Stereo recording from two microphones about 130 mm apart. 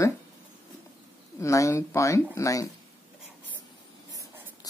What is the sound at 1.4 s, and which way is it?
Speech, 25° left (ahead or behind).